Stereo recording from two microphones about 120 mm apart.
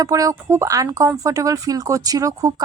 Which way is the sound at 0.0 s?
30° right (ahead or behind).